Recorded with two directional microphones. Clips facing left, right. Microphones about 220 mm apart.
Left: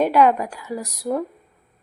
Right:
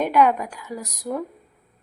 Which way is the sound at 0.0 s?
10° left (ahead or behind).